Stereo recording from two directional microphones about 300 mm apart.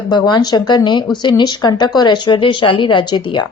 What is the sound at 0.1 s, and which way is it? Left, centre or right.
A woman's voice, centre.